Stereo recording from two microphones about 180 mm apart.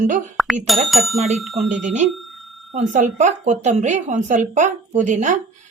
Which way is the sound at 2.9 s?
45° right (ahead or behind).